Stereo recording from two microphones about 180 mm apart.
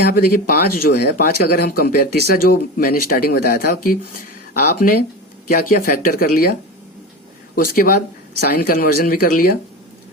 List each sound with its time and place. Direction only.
0.2 s speech: 55° left (ahead or behind)
7.5 s speech: 55° left (ahead or behind)